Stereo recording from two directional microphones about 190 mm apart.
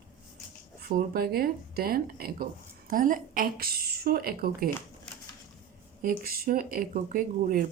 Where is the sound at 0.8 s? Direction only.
50° right (ahead or behind).